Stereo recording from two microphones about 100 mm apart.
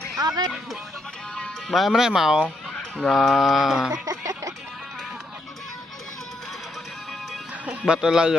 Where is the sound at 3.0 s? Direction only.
Centre (ahead or behind).